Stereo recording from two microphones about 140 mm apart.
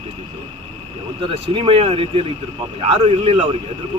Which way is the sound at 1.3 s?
40° right (ahead or behind).